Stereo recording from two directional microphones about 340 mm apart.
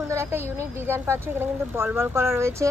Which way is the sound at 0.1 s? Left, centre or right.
Centre.